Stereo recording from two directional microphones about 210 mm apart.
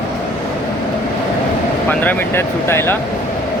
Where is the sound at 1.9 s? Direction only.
10° left (ahead or behind).